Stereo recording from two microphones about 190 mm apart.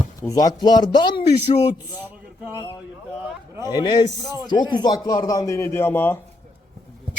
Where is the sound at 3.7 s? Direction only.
20° left (ahead or behind).